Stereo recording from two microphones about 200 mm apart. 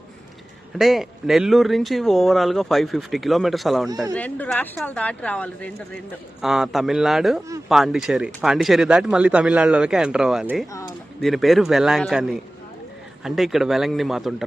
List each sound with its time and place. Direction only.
0.8 s speech: centre (ahead or behind)
10.7 s speech: 15° left (ahead or behind)
11.2 s speech: centre (ahead or behind)